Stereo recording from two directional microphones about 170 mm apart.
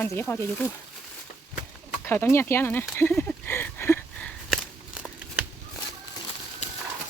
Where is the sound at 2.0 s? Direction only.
15° left (ahead or behind).